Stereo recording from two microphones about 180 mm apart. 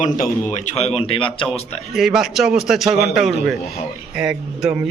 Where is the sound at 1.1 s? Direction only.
30° left (ahead or behind).